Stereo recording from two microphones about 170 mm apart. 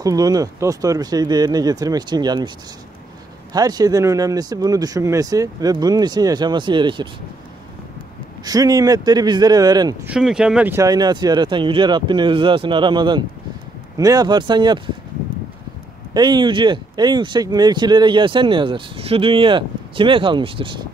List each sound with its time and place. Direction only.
0.0 s speech: 20° right (ahead or behind)
3.5 s speech: 20° right (ahead or behind)
8.5 s speech: 20° right (ahead or behind)
10.0 s speech: 5° right (ahead or behind); by 14.8 s 25° right (ahead or behind)
16.1 s speech: 25° right (ahead or behind)